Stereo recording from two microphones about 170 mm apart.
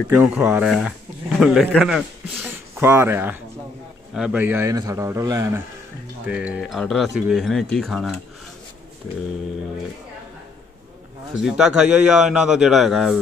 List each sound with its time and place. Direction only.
0.1 s a man's voice: 10° right (ahead or behind)
6.2 s a man's voice: 5° right (ahead or behind)
11.3 s a man's voice: centre (ahead or behind)